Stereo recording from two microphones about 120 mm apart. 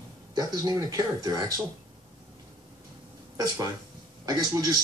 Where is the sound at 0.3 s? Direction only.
35° right (ahead or behind).